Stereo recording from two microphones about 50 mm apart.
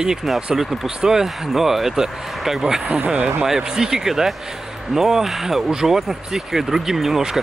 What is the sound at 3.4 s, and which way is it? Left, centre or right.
Speech, centre.